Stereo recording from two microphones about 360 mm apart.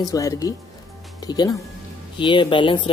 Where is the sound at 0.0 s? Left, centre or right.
Centre.